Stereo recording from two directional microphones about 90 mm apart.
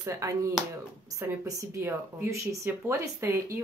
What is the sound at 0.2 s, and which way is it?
Speech, 35° right (ahead or behind).